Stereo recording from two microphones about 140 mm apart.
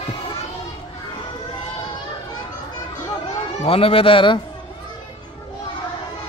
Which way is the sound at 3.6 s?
40° left (ahead or behind).